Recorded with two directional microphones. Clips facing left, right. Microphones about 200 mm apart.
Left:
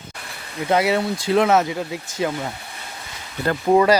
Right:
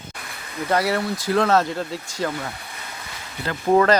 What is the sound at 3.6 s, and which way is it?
Speech, 10° left (ahead or behind).